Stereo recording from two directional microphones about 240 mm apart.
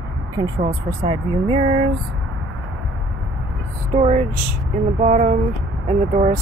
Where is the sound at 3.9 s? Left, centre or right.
Right.